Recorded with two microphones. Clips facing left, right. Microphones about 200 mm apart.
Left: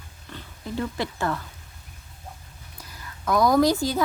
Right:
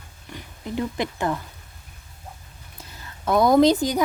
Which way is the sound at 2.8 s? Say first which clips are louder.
Right 1 dB; 25° right (ahead or behind).